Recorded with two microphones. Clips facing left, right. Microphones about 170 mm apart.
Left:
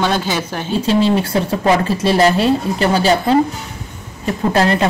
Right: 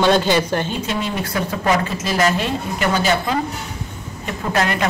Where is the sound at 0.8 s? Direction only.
30° left (ahead or behind).